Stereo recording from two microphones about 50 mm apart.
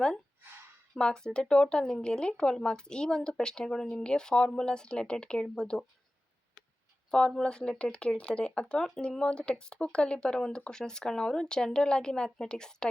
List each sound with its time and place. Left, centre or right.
0.9 s speech: centre
7.1 s speech: centre